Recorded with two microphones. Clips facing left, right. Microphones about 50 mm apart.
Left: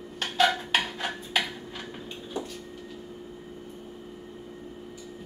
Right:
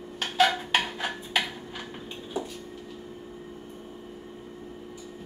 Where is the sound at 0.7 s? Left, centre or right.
Centre.